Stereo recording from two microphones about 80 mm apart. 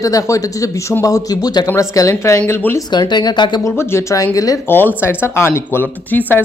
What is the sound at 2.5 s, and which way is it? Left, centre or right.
Speech, left.